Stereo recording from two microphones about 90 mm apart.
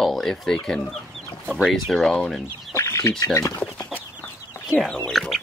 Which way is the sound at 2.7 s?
35° left (ahead or behind).